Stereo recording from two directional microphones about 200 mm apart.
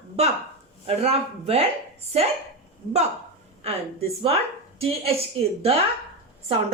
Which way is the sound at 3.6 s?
30° right (ahead or behind).